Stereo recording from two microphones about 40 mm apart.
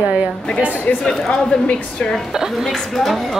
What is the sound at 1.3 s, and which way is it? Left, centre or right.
Speech, left.